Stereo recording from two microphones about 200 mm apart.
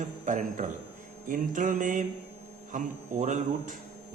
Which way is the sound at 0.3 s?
40° right (ahead or behind).